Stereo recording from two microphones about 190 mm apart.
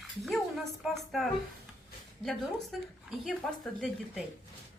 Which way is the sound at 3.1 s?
Centre (ahead or behind).